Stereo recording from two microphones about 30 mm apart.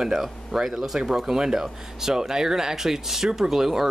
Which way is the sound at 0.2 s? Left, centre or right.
Centre.